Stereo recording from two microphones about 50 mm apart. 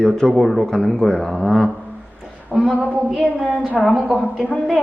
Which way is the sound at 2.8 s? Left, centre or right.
Right.